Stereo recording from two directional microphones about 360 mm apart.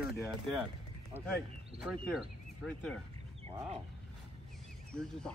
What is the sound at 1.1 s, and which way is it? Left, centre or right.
Speech, centre.